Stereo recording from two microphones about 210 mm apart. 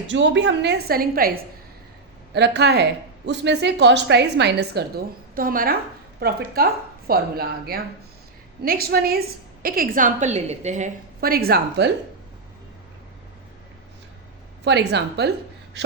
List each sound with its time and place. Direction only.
0.1 s a woman's voice: 60° right (ahead or behind)
14.6 s a woman's voice: 55° right (ahead or behind)